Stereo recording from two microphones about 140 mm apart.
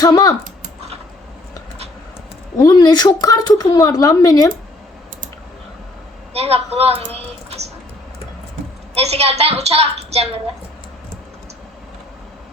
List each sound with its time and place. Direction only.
0.0 s speech: 30° left (ahead or behind)
2.6 s speech: 25° left (ahead or behind)
6.3 s a woman's voice: 45° right (ahead or behind)
9.0 s a woman's voice: 45° right (ahead or behind)